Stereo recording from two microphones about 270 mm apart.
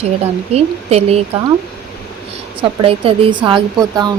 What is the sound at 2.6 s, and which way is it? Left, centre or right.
Speech, right.